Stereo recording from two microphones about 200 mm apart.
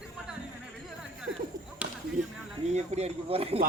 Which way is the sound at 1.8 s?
60° right (ahead or behind).